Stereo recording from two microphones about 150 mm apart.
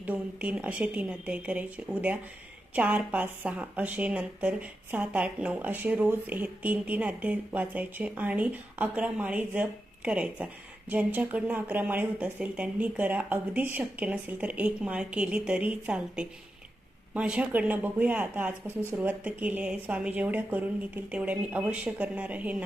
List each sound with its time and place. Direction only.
0.0 s speech: 10° right (ahead or behind)